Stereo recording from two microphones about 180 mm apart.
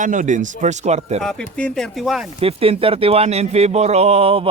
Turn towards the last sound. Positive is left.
turn(degrees=-35)  # may be behind; listen again after turning